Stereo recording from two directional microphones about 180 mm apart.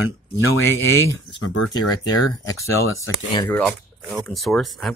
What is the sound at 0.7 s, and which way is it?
Speech, 10° left (ahead or behind).